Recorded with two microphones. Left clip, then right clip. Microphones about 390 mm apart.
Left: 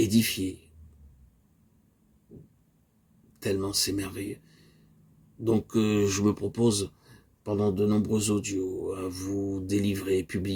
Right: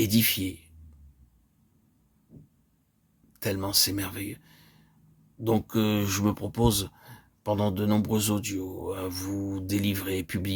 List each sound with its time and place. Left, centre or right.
0.0 s speech: right
3.4 s speech: right